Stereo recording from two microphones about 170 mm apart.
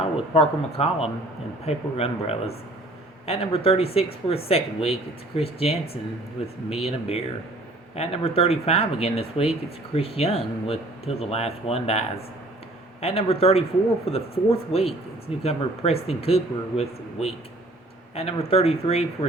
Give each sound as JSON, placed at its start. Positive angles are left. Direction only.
{"t": 0.3, "sound": "speech", "side_deg": 35}